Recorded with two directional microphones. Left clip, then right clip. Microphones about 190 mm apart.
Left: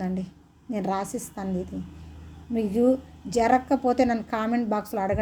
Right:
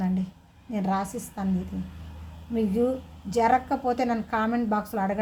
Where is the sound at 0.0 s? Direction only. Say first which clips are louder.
Right 1 dB; 30° left (ahead or behind).